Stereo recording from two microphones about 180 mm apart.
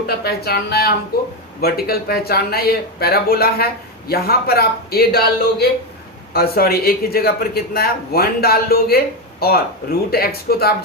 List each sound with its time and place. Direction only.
0.3 s speech: 60° left (ahead or behind)